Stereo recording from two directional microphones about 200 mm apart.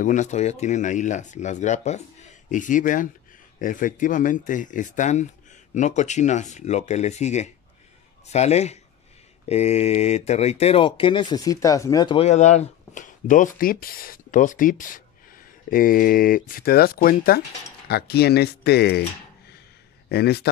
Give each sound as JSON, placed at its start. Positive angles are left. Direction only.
{"t": 0.0, "sound": "speech", "side_deg": 40}
{"t": 12.3, "sound": "speech", "side_deg": 35}
{"t": 20.1, "sound": "speech", "side_deg": 55}